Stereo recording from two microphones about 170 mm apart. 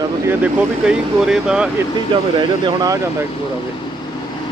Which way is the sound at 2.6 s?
20° right (ahead or behind).